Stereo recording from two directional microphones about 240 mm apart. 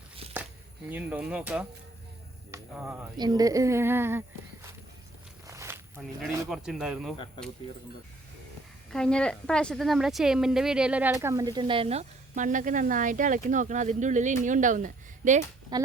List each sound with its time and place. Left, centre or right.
0.9 s speech: centre
5.5 s speech: centre
8.9 s a woman's voice: centre; by 15.4 s right
15.7 s speech: centre